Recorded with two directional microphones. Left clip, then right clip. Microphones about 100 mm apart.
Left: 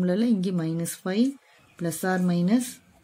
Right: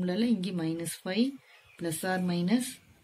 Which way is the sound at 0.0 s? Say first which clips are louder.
Left 5 dB; 55° left (ahead or behind).